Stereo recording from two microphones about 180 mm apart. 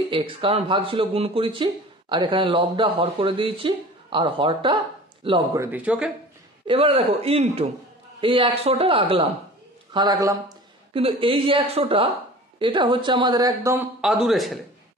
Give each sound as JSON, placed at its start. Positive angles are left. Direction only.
{"t": 0.1, "sound": "speech", "side_deg": -30}
{"t": 5.6, "sound": "a man's voice", "side_deg": -10}
{"t": 6.7, "sound": "a woman's voice", "side_deg": -30}
{"t": 9.9, "sound": "a woman's voice", "side_deg": -20}
{"t": 14.0, "sound": "a man's voice", "side_deg": 0}